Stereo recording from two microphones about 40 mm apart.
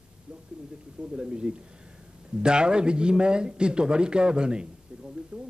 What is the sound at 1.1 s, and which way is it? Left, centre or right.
A man's voice, right.